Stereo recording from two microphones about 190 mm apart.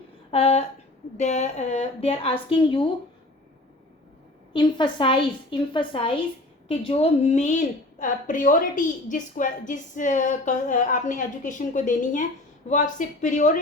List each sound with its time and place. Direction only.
0.3 s a woman's voice: 30° left (ahead or behind)
4.5 s a woman's voice: 25° left (ahead or behind); by 13.6 s 40° left (ahead or behind)